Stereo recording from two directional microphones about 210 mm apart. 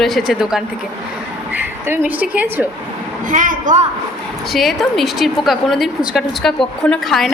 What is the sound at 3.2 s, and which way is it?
Speech, 40° right (ahead or behind).